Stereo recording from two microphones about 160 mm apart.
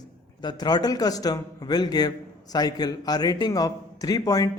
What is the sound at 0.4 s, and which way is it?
A man's voice, 25° left (ahead or behind).